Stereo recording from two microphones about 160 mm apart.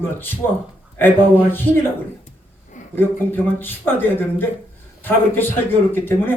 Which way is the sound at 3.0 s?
10° left (ahead or behind).